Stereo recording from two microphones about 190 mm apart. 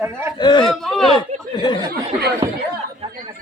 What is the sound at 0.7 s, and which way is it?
Speech, centre (ahead or behind).